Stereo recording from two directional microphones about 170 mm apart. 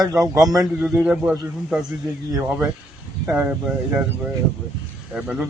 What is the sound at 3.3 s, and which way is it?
Speech, 10° right (ahead or behind).